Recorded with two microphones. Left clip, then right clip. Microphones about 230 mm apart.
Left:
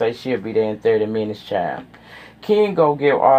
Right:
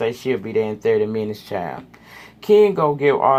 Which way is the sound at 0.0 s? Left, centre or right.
Right.